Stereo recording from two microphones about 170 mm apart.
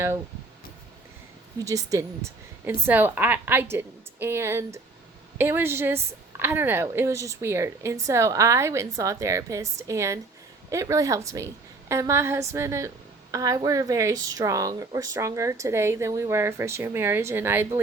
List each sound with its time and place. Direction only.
1.6 s a woman's voice: 20° right (ahead or behind)